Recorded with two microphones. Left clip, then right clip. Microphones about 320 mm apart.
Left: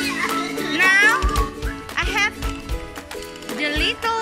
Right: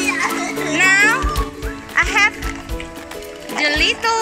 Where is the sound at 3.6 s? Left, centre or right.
Centre.